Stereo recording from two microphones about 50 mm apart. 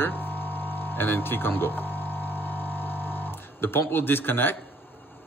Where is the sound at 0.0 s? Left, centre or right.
Left.